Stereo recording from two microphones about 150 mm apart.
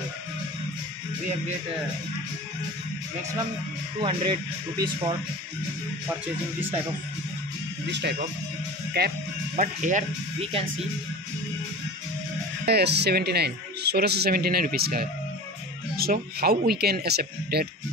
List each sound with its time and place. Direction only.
4.0 s speech: 35° right (ahead or behind)
6.0 s speech: 10° right (ahead or behind)
7.8 s speech: 90° right
9.6 s speech: 60° right (ahead or behind)
12.6 s speech: 90° right
16.0 s speech: 90° right